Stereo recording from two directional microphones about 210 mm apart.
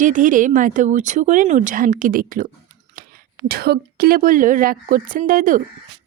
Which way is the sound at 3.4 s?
45° right (ahead or behind).